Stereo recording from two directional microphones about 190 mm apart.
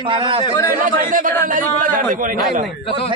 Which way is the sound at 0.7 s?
45° right (ahead or behind).